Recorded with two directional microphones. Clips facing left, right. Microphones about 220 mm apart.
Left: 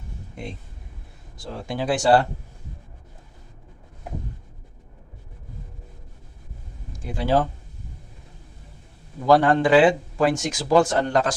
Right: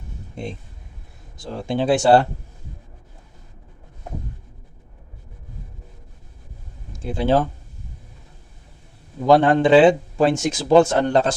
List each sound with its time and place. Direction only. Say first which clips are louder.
0.4 s speech: right 4 dB; 25° right (ahead or behind)
6.9 s speech: right 5 dB; 25° right (ahead or behind)
9.2 s speech: right 3 dB; 20° right (ahead or behind)